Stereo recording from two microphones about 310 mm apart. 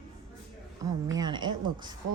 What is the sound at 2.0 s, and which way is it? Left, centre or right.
Speech, right.